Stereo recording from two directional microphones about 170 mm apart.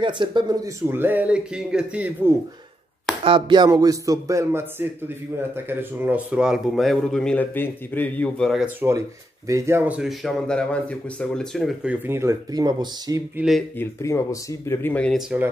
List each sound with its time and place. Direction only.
0.0 s speech: 25° right (ahead or behind); by 2.3 s 10° right (ahead or behind)
3.3 s a man's voice: 25° right (ahead or behind); by 8.6 s 5° left (ahead or behind)
8.6 s speech: 15° right (ahead or behind)
13.4 s a man's voice: centre (ahead or behind)
13.7 s speech: 15° left (ahead or behind)
15.1 s a man's voice: 5° right (ahead or behind)